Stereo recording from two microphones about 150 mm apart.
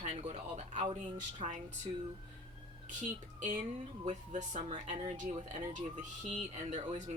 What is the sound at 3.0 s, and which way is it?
Speech, 55° right (ahead or behind).